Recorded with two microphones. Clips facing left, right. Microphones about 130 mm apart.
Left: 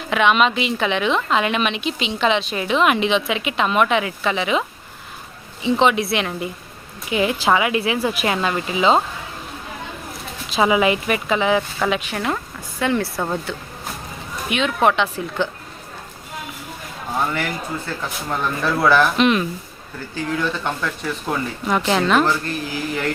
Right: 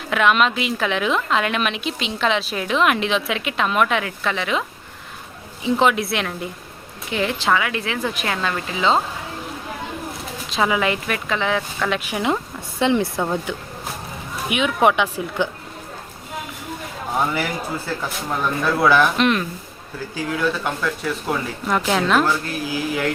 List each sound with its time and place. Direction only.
0.1 s a woman's voice: centre (ahead or behind)
5.6 s a woman's voice: centre (ahead or behind)
10.5 s speech: 10° left (ahead or behind)
11.9 s speech: 10° right (ahead or behind)
13.1 s a woman's voice: centre (ahead or behind)
14.5 s speech: 10° right (ahead or behind)
17.2 s a woman's voice: 10° right (ahead or behind)